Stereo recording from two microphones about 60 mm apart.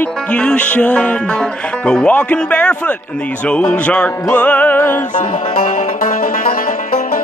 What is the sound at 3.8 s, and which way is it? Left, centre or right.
Music, left.